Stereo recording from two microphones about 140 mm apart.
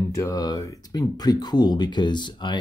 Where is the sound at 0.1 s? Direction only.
25° left (ahead or behind).